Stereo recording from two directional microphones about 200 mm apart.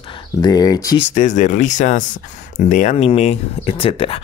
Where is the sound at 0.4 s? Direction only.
20° left (ahead or behind).